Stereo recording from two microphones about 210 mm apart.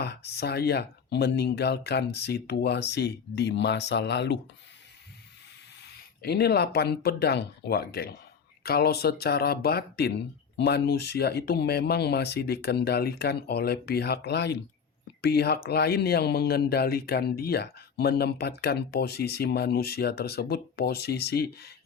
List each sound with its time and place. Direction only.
0.0 s speech: 50° left (ahead or behind)
6.2 s speech: 50° left (ahead or behind)